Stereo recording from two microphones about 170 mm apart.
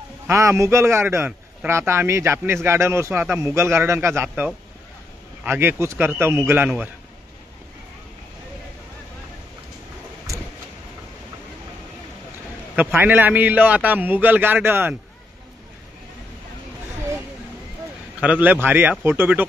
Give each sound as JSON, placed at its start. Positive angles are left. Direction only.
{"t": 0.3, "sound": "a man's voice", "side_deg": -15}
{"t": 10.3, "sound": "vehicle", "side_deg": -20}
{"t": 12.7, "sound": "a man's voice", "side_deg": -10}
{"t": 18.2, "sound": "a man's voice", "side_deg": -10}